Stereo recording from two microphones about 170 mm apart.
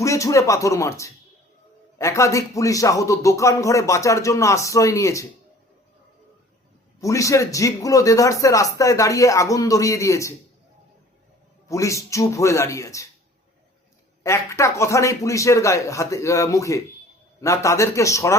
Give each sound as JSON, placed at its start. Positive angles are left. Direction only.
{"t": 0.0, "sound": "speech", "side_deg": 20}
{"t": 7.0, "sound": "speech", "side_deg": 20}
{"t": 11.7, "sound": "speech", "side_deg": 15}
{"t": 14.3, "sound": "speech", "side_deg": 15}